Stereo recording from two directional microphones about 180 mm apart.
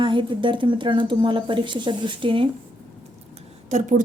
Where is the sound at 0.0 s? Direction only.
25° right (ahead or behind).